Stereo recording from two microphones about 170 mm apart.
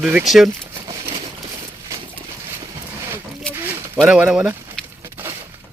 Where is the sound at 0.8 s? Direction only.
30° right (ahead or behind).